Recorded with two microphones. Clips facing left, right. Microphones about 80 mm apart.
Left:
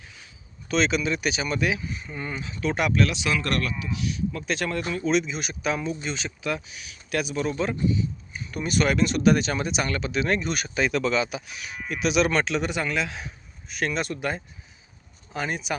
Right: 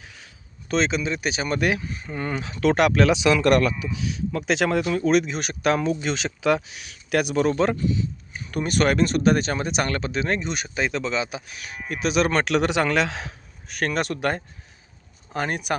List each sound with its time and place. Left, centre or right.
0.7 s speech: right
1.5 s speech: right
4.1 s speech: right
4.9 s speech: right
11.5 s speech: right
12.5 s speech: right
13.7 s speech: right
15.3 s speech: right